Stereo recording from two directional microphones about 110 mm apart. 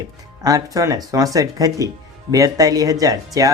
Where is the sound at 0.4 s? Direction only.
30° right (ahead or behind).